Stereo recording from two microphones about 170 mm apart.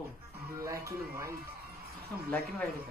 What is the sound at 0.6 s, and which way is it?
Music, 20° right (ahead or behind).